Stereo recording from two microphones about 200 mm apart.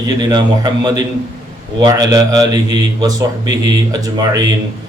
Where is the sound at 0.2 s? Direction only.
20° right (ahead or behind).